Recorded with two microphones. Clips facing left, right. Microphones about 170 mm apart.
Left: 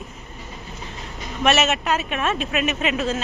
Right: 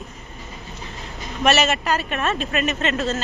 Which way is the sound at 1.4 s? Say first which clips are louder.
Right 1 dB; centre (ahead or behind).